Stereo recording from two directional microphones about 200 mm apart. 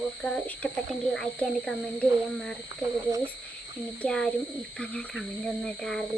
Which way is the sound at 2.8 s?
15° right (ahead or behind).